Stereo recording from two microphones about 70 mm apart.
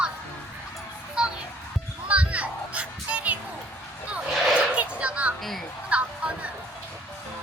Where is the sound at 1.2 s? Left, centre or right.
Centre.